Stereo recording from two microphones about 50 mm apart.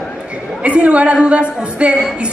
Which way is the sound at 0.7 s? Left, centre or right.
Right.